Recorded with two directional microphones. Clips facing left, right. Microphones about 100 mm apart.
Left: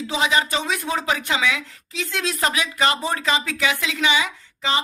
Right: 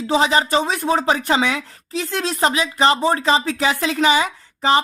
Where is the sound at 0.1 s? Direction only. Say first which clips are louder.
Right 5 dB; 35° right (ahead or behind).